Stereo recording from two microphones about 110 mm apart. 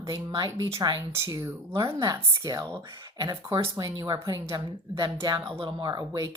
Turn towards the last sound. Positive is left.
turn(degrees=-35)  # may be behind; listen again after turning